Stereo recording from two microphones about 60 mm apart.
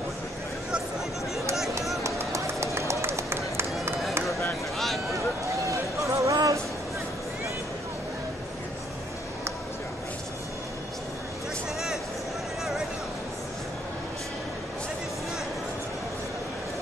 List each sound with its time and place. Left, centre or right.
2.0 s run: right
4.7 s a sound: centre
5.7 s music: right